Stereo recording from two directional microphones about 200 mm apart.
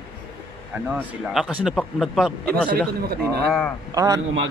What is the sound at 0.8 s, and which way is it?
A man's voice, 5° right (ahead or behind).